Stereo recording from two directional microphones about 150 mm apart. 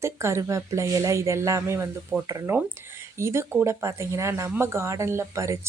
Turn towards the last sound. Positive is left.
turn(degrees=-20)  # may be behind; listen again after turning